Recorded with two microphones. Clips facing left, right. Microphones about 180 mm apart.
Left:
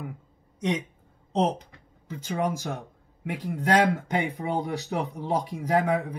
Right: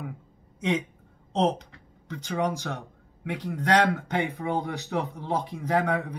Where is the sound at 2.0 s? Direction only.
5° left (ahead or behind).